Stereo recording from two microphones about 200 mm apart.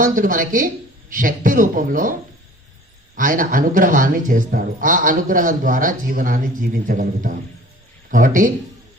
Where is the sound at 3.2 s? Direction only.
45° right (ahead or behind).